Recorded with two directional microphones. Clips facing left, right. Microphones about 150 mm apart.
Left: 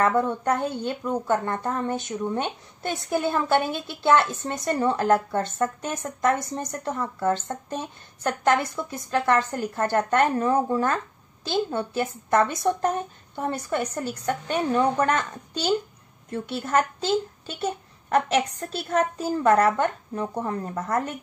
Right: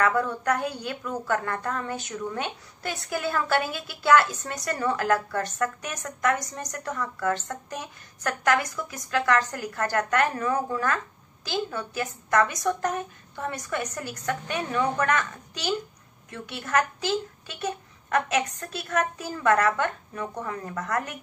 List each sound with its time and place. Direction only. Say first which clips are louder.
0.0 s a woman's voice: left 2 dB; 25° left (ahead or behind)